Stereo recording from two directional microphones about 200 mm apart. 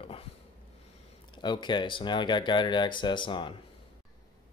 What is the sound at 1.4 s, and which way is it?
Speech, 25° left (ahead or behind).